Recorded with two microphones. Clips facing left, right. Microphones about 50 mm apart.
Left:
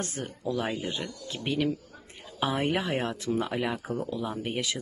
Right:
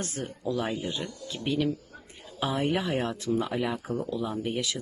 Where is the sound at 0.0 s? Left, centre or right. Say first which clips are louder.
Even; left.